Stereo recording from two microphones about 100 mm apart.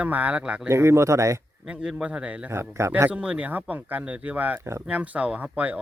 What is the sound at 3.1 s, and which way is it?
Speech, 10° right (ahead or behind).